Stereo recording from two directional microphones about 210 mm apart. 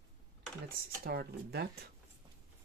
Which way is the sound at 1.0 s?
50° right (ahead or behind).